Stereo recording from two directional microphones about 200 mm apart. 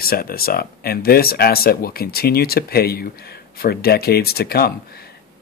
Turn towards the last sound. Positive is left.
turn(degrees=50)  # may be behind; listen again after turning